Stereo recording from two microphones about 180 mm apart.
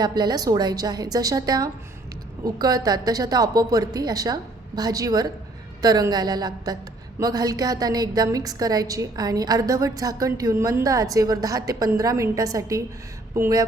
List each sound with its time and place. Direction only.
0.0 s a woman's voice: 20° right (ahead or behind)